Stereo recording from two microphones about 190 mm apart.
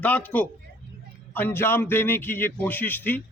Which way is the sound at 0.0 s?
5° left (ahead or behind).